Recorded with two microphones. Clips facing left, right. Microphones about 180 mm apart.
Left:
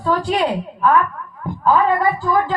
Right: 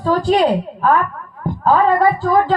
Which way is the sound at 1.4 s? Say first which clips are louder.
Right 2 dB; 35° right (ahead or behind).